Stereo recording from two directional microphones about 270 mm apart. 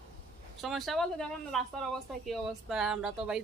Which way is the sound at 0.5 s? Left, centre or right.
Centre.